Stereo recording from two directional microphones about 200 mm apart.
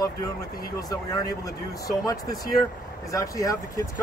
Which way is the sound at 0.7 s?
20° left (ahead or behind).